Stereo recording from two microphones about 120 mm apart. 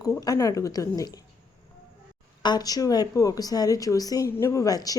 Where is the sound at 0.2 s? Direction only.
30° left (ahead or behind).